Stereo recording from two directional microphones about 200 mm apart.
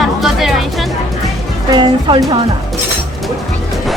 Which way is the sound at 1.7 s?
20° right (ahead or behind).